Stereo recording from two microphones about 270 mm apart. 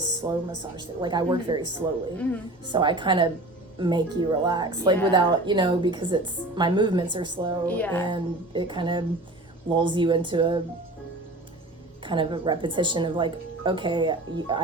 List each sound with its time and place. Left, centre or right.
0.2 s a woman's voice: centre
2.1 s a woman's voice: centre
2.6 s a woman's voice: centre
7.7 s music: centre
8.0 s a woman's voice: centre
12.0 s a woman's voice: centre